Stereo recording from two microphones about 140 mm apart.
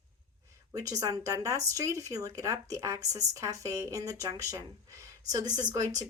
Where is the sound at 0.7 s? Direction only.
25° right (ahead or behind).